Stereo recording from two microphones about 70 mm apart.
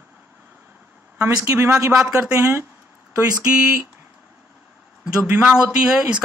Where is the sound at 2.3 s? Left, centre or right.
Right.